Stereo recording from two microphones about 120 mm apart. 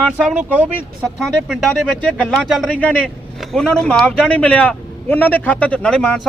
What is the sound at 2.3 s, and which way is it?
Speech, centre (ahead or behind).